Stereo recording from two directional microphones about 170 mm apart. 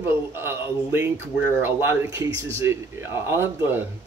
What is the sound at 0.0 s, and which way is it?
Speech, 15° right (ahead or behind).